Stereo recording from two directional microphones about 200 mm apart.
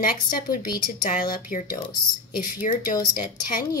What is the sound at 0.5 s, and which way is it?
A woman's voice, 45° left (ahead or behind).